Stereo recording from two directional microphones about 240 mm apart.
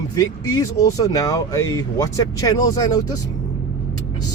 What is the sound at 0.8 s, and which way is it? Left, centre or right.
Speech, centre.